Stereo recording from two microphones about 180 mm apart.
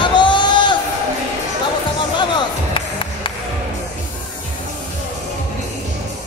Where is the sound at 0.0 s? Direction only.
25° left (ahead or behind).